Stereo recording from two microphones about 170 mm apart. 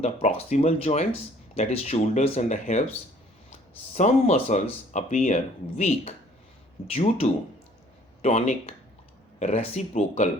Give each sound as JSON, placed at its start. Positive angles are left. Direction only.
{"t": 0.0, "sound": "speech", "side_deg": 40}
{"t": 3.9, "sound": "speech", "side_deg": 40}